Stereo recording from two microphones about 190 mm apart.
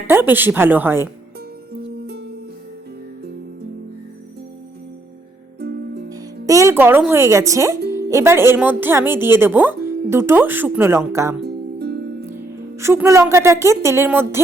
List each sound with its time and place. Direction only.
0.1 s a woman's voice: 10° right (ahead or behind)
1.7 s music: 60° right (ahead or behind)
5.5 s music: 60° right (ahead or behind)
6.1 s a woman's voice: 15° right (ahead or behind)
11.4 s music: 60° right (ahead or behind)
12.7 s a woman's voice: 15° right (ahead or behind)